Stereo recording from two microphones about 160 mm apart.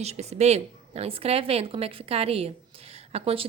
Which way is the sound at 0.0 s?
40° right (ahead or behind).